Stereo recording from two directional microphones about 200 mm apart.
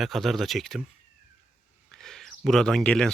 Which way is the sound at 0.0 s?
Centre (ahead or behind).